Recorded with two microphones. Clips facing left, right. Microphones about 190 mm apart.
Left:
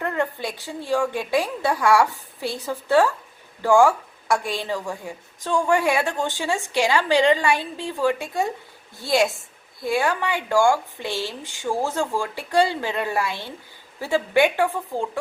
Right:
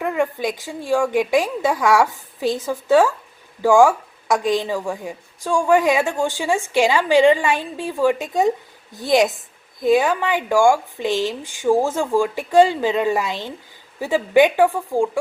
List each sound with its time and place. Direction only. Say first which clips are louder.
0.0 s a woman's voice: right 4 dB; 15° right (ahead or behind)